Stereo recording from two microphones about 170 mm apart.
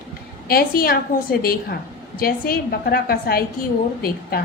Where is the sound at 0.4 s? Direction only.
60° left (ahead or behind).